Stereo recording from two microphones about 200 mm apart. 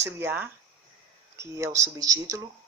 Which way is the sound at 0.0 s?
10° right (ahead or behind).